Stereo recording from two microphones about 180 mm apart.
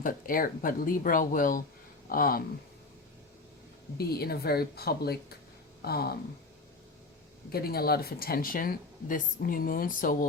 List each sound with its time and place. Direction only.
0.0 s speech: 50° left (ahead or behind)
3.9 s speech: 60° left (ahead or behind)
7.5 s speech: 60° left (ahead or behind)